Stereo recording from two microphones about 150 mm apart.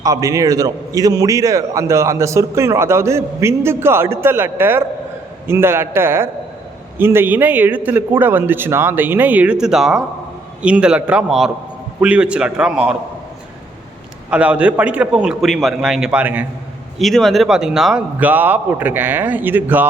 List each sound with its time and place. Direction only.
0.0 s a man's voice: 25° right (ahead or behind); by 13.0 s 5° right (ahead or behind)
14.3 s a man's voice: 10° right (ahead or behind)
17.0 s a man's voice: centre (ahead or behind)